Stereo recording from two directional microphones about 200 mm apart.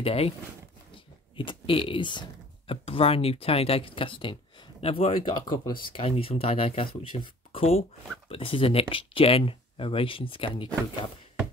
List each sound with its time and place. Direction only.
0.0 s speech: 30° left (ahead or behind)